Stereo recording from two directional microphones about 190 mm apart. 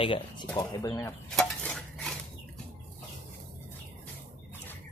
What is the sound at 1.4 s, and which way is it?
Dishes, 5° left (ahead or behind).